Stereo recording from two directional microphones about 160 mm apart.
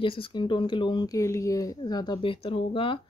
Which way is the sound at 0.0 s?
35° left (ahead or behind).